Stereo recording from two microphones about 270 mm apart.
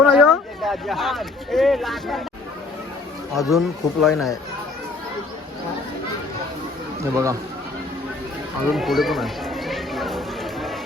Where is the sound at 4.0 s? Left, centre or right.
Centre.